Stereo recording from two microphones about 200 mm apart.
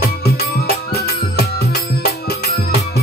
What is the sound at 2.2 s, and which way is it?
Music, 55° left (ahead or behind).